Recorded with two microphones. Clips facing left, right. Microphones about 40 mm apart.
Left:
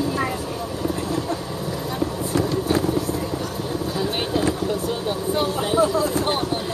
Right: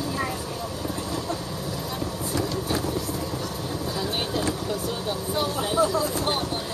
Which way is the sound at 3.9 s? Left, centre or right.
Centre.